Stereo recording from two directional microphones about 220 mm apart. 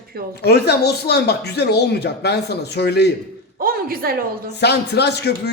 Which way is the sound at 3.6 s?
40° right (ahead or behind).